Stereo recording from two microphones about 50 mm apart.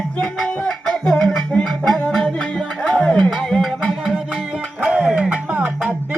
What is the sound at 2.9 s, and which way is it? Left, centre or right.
Music, left.